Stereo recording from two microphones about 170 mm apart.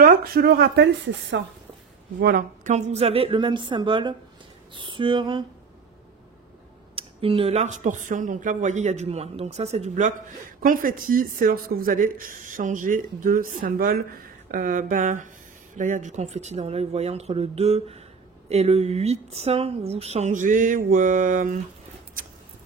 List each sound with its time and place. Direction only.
0.0 s speech: 60° right (ahead or behind); by 1.4 s 85° right
2.1 s speech: 60° right (ahead or behind)
2.7 s a woman's voice: 40° right (ahead or behind)
7.0 s speech: 30° right (ahead or behind); by 21.5 s 50° right (ahead or behind)
22.2 s a sound: 55° right (ahead or behind)